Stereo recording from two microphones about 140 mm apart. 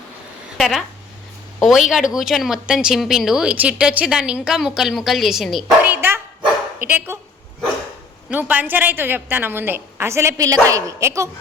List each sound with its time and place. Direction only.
0.5 s speech: centre (ahead or behind)
5.8 s dog: 15° right (ahead or behind)
8.3 s a woman's voice: 10° right (ahead or behind)